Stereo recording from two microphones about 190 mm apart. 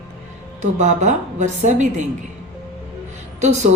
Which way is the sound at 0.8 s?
40° right (ahead or behind).